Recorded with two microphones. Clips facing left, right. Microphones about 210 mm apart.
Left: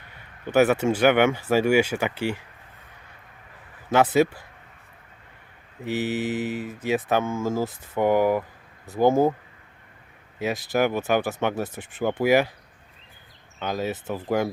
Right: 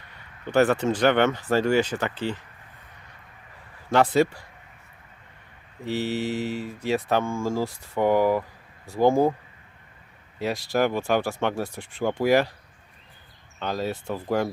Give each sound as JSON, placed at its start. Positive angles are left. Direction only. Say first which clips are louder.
{"t": 0.5, "sound": "speech", "louder": "left 1 dB", "side_deg": 5}
{"t": 3.8, "sound": "speech", "louder": "left 1 dB", "side_deg": 5}
{"t": 5.8, "sound": "speech", "louder": "left 1 dB", "side_deg": 5}
{"t": 7.3, "sound": "speech", "louder": "left 1 dB", "side_deg": 20}
{"t": 7.8, "sound": "speech", "louder": "even", "side_deg": 5}
{"t": 8.9, "sound": "speech", "louder": "left 1 dB", "side_deg": 20}
{"t": 10.3, "sound": "speech", "louder": "left 1 dB", "side_deg": 0}
{"t": 13.6, "sound": "speech", "louder": "left 1 dB", "side_deg": 5}